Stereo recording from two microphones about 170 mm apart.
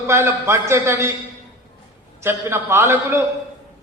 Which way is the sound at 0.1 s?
15° right (ahead or behind).